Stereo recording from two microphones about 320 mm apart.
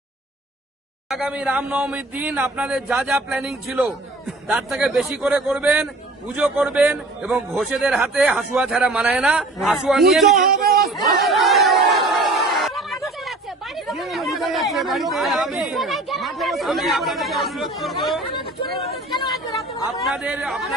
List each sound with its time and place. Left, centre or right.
1.1 s a man's voice: centre
10.3 s a man's voice: right
11.2 s chatter: centre
13.7 s a man's voice: centre
20.1 s a man's voice: centre